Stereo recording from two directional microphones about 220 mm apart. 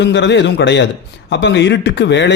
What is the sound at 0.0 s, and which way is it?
A man's voice, 55° left (ahead or behind).